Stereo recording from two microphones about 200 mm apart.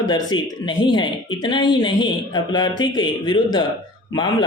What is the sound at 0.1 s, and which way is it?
Speech, 20° left (ahead or behind).